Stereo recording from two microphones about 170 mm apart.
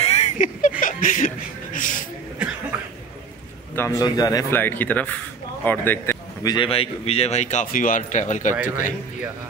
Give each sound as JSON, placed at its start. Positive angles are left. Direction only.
{"t": 0.0, "sound": "speech", "side_deg": 40}
{"t": 3.7, "sound": "a man's voice", "side_deg": 15}
{"t": 6.4, "sound": "speech", "side_deg": 25}